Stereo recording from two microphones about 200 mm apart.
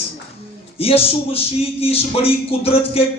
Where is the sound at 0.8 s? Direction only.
30° left (ahead or behind).